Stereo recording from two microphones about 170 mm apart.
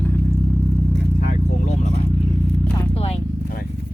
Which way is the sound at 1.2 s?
50° left (ahead or behind).